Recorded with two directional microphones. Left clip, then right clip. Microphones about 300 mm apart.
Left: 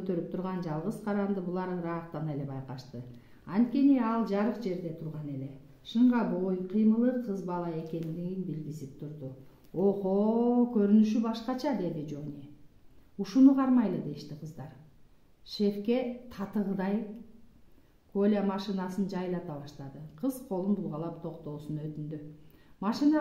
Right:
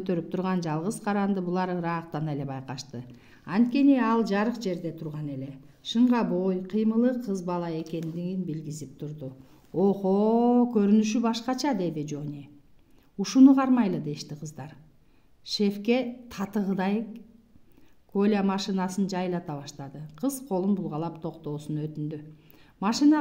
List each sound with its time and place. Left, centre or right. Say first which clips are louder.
0.0 s speech: right 4 dB; right
9.8 s speech: right 4 dB; right
18.1 s speech: right 3 dB; right